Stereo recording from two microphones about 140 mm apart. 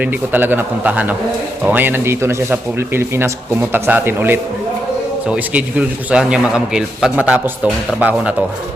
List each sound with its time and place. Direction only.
0.0 s a man's voice: 15° right (ahead or behind)